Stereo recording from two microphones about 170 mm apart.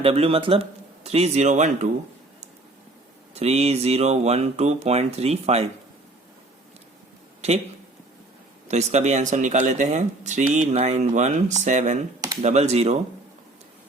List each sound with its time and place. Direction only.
0.0 s speech: 35° right (ahead or behind)
3.3 s speech: 40° right (ahead or behind)
8.6 s speech: 40° right (ahead or behind)